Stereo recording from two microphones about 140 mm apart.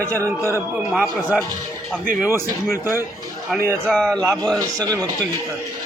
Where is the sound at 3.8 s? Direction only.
5° left (ahead or behind).